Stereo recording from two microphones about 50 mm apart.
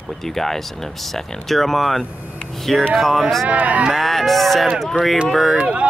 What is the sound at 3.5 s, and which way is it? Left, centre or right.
Speech, right.